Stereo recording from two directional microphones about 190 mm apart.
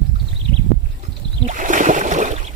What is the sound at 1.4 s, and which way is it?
Boat, 40° right (ahead or behind).